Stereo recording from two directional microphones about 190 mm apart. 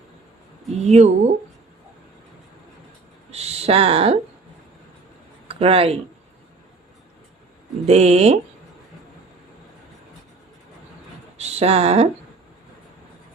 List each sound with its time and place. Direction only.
0.7 s speech: 35° right (ahead or behind)
3.3 s a sound: 35° right (ahead or behind)
5.5 s speech: 30° right (ahead or behind)
7.9 s speech: 35° right (ahead or behind)
11.3 s speech: 35° right (ahead or behind)